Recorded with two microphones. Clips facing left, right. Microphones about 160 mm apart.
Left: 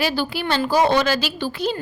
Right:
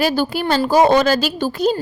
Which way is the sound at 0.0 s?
45° right (ahead or behind).